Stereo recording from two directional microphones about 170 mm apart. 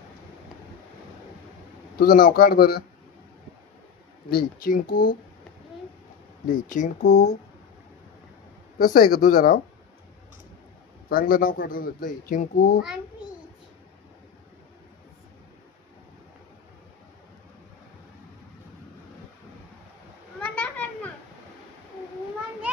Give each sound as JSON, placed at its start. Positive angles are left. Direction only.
{"t": 2.0, "sound": "a man's voice", "side_deg": 60}
{"t": 4.6, "sound": "a man's voice", "side_deg": 55}
{"t": 6.4, "sound": "speech", "side_deg": 50}
{"t": 8.7, "sound": "speech", "side_deg": 50}
{"t": 11.1, "sound": "a man's voice", "side_deg": 55}
{"t": 20.3, "sound": "children playing", "side_deg": 10}